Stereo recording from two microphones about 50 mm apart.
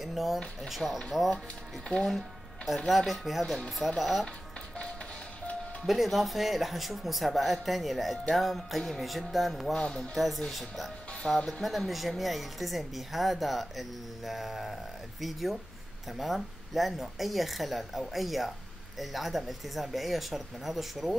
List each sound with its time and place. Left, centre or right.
0.0 s a sound: centre
0.6 s speech: centre
2.0 s music: centre
2.9 s speech: centre
5.9 s speech: centre
9.8 s speech: centre
10.1 s speech: centre